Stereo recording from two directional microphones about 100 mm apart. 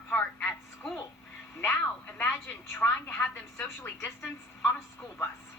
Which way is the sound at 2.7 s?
15° left (ahead or behind).